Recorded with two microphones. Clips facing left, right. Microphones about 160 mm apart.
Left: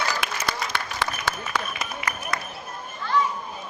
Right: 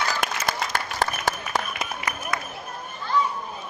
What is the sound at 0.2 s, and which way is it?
Applause, 45° right (ahead or behind).